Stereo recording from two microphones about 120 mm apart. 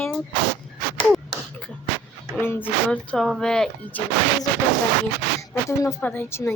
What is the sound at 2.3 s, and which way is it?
Speech, 15° left (ahead or behind).